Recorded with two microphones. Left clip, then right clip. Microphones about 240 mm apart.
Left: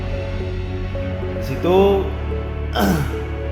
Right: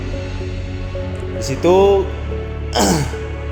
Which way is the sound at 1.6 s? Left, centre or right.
Right.